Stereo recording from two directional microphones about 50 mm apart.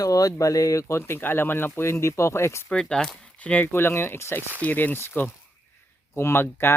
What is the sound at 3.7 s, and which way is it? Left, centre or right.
Speech, left.